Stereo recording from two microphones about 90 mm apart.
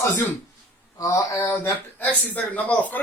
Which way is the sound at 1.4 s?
25° left (ahead or behind).